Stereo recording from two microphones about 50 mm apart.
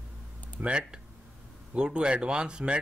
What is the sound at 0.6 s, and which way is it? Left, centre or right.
Speech, centre.